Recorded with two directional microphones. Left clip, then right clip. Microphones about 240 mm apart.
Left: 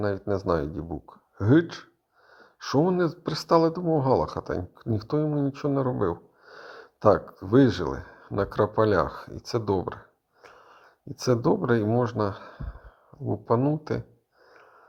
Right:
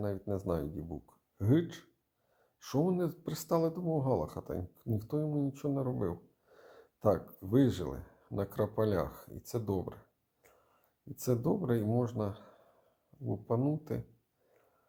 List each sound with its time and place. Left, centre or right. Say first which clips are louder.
0.0 s speech: left 10 dB; left
10.4 s wheeze: left 16 dB; left
11.2 s speech: left 10 dB; centre